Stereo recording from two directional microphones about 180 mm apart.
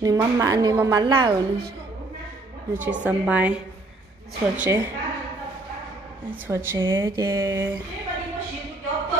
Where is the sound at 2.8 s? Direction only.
10° right (ahead or behind).